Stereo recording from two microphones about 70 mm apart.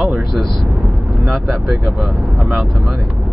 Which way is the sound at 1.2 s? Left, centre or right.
Centre.